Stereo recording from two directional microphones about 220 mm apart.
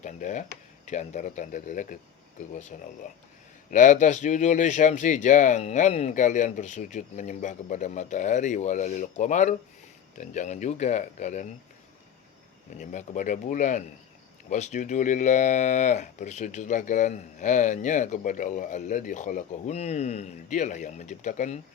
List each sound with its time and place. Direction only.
0.0 s speech: 35° left (ahead or behind)
12.7 s speech: 35° left (ahead or behind)